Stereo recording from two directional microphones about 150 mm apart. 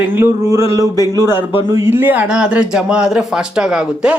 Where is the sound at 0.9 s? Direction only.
25° left (ahead or behind).